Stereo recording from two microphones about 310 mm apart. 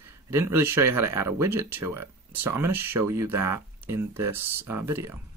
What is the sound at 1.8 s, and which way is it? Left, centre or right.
Speech, right.